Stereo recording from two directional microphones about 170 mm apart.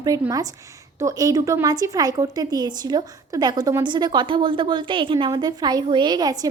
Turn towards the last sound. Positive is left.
turn(degrees=-25)  # may be behind; listen again after turning